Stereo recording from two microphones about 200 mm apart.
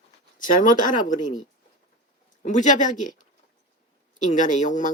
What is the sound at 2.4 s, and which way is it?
Speech, 40° left (ahead or behind).